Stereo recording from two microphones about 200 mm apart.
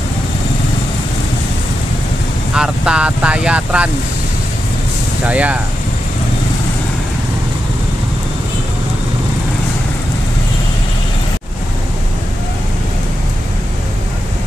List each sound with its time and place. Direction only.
2.5 s speech: 5° right (ahead or behind)
5.2 s speech: 5° right (ahead or behind)